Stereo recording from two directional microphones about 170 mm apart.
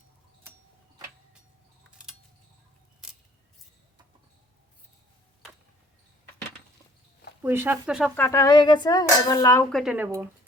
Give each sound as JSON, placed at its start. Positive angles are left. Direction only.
{"t": 1.9, "sound": "keys jangling", "side_deg": -5}
{"t": 7.4, "sound": "speech", "side_deg": -15}
{"t": 8.1, "sound": "speech", "side_deg": 15}
{"t": 9.7, "sound": "speech", "side_deg": -5}